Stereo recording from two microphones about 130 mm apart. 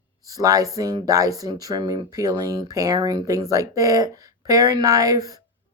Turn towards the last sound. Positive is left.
turn(degrees=-30)  # may be behind; listen again after turning